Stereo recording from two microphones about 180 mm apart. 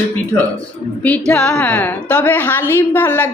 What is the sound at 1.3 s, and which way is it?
A woman's voice, 5° left (ahead or behind).